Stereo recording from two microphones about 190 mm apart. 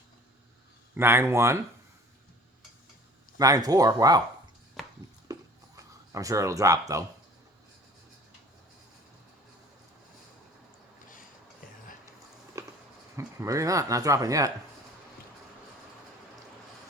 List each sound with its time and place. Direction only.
0.9 s speech: 10° right (ahead or behind)
3.3 s speech: 20° right (ahead or behind)
4.8 s chopping: centre (ahead or behind)
5.3 s a sound: 15° right (ahead or behind)
13.1 s speech: 15° right (ahead or behind)